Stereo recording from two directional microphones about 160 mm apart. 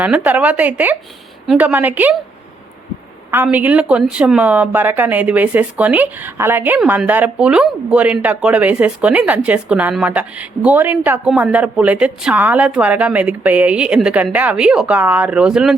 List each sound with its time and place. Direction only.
0.0 s speech: 10° right (ahead or behind)
3.3 s speech: 10° right (ahead or behind)